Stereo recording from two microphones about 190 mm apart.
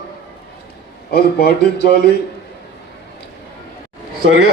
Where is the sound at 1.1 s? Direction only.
55° left (ahead or behind).